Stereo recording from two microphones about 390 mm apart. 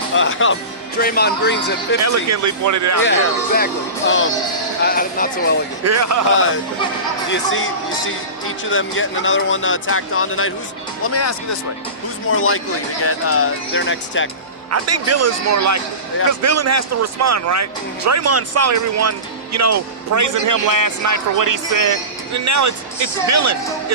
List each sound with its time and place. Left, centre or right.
0.1 s speech: left
2.0 s a man's voice: right
3.0 s speech: left
5.8 s a man's voice: right
7.3 s speech: left
14.7 s a man's voice: right